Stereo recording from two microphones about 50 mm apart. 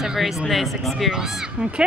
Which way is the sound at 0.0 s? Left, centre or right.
Centre.